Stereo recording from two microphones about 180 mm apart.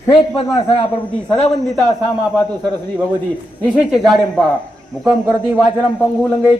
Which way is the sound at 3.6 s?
10° right (ahead or behind).